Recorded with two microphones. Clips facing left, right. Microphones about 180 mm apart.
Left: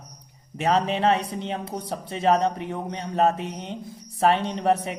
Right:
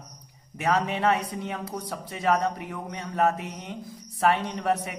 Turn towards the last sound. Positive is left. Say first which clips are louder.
# left 4 dB
turn(degrees=25)  # may be behind; listen again after turning